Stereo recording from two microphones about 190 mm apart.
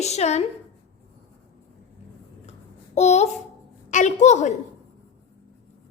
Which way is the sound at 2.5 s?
35° left (ahead or behind).